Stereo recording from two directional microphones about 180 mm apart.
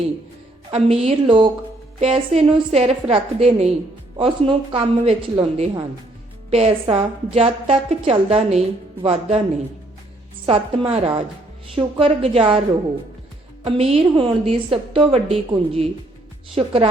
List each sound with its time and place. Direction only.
0.7 s a woman's voice: 35° right (ahead or behind)
10.4 s a woman's voice: 30° right (ahead or behind)
13.7 s a woman's voice: 35° right (ahead or behind)